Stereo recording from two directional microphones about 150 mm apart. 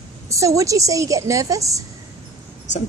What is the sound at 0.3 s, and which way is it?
A woman's voice, 20° right (ahead or behind).